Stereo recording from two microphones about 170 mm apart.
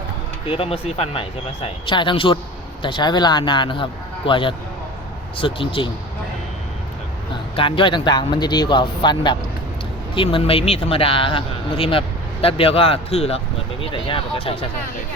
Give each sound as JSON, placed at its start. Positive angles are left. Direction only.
{"t": 0.4, "sound": "speech", "side_deg": 30}
{"t": 7.5, "sound": "speech", "side_deg": 30}